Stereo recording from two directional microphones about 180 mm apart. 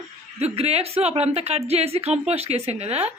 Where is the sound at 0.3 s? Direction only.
35° right (ahead or behind).